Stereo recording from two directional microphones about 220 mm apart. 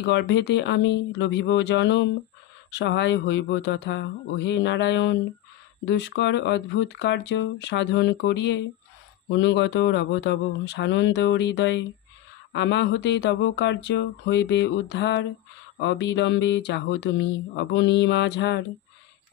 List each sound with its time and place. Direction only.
0.0 s speech: 55° left (ahead or behind)